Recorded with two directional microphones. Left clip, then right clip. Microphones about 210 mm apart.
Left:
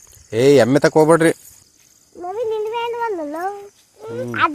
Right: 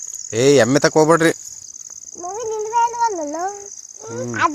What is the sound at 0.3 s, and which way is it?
Speech, 25° left (ahead or behind).